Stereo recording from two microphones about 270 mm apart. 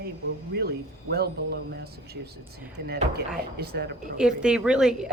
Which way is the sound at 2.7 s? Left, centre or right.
Right.